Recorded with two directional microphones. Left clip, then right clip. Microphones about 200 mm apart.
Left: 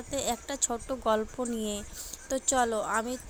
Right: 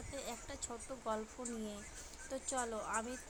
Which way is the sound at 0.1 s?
30° left (ahead or behind).